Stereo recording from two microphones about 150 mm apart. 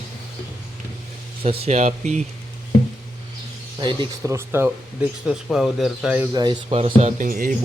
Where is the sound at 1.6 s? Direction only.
50° right (ahead or behind).